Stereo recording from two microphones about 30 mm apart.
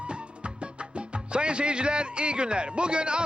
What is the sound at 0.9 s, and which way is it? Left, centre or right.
Speech, right.